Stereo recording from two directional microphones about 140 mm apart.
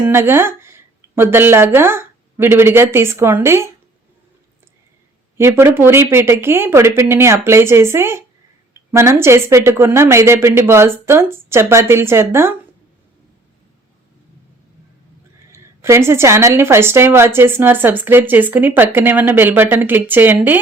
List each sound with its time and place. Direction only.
0.0 s a woman's voice: 15° right (ahead or behind)
5.4 s a woman's voice: 20° right (ahead or behind)
15.5 s a woman's voice: 20° right (ahead or behind)